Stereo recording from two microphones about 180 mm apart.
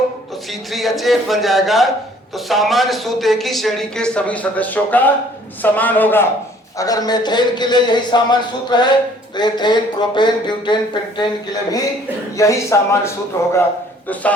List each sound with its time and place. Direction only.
0.7 s a man's voice: centre (ahead or behind)